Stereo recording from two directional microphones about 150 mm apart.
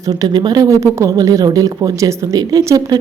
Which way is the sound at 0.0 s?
25° right (ahead or behind).